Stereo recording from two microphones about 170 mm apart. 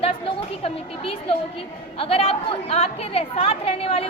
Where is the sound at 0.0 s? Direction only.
35° left (ahead or behind).